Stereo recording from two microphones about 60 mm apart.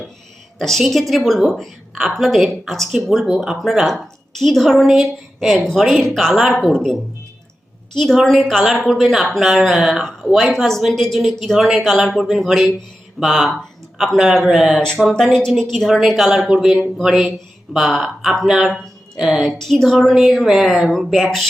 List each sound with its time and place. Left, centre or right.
0.6 s a woman's voice: centre
6.7 s a woman's voice: centre
15.1 s a woman's voice: centre
16.5 s a sound: centre
17.7 s a woman's voice: centre